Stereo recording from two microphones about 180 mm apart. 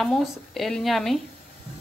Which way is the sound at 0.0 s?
Centre (ahead or behind).